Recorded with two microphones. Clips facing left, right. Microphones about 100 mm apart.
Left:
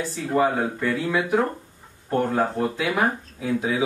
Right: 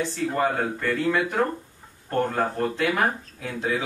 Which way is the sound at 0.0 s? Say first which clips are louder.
Left 2 dB; 5° left (ahead or behind).